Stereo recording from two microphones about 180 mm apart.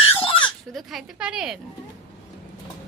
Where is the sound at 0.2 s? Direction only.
30° left (ahead or behind).